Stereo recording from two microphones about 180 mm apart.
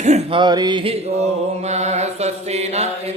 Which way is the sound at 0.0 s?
40° right (ahead or behind).